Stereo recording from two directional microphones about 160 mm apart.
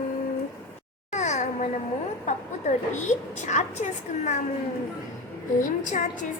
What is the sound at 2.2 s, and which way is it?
A woman's voice, 50° left (ahead or behind).